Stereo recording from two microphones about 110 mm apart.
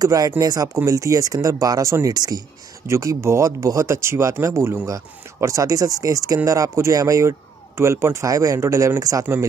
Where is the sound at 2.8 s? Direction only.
25° right (ahead or behind).